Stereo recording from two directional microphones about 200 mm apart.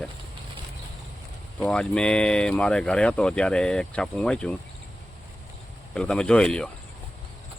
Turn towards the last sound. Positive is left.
turn(degrees=5)  # may be behind; listen again after turning